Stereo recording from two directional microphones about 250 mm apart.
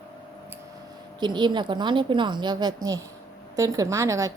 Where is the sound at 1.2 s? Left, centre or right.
Centre.